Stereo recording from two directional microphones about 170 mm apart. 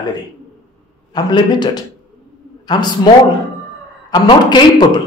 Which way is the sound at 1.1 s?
25° left (ahead or behind).